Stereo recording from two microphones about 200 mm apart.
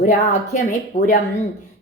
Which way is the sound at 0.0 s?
35° left (ahead or behind).